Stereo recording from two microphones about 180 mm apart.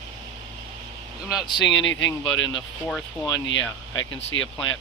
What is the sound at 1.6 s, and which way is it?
Speech, 90° left.